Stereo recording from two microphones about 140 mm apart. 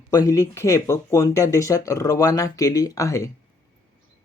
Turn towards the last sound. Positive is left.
turn(degrees=20)  # may be behind; listen again after turning